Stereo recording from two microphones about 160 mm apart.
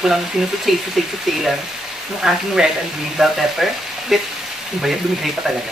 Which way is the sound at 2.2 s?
5° right (ahead or behind).